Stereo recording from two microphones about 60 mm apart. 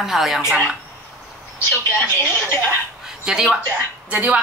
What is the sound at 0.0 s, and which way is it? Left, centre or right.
Speech, centre.